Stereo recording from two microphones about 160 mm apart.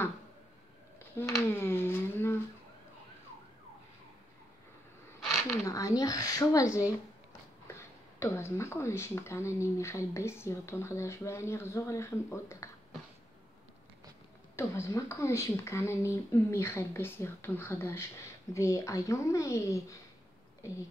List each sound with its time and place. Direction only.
1.1 s a sound: 15° left (ahead or behind)
5.3 s speech: 15° left (ahead or behind)
8.2 s speech: 15° left (ahead or behind)
14.6 s a woman's voice: 20° left (ahead or behind)